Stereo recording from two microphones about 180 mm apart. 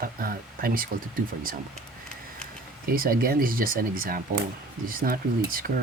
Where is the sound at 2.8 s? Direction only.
55° right (ahead or behind).